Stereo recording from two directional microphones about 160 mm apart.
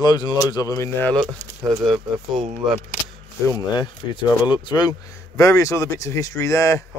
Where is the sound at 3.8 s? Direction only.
30° left (ahead or behind).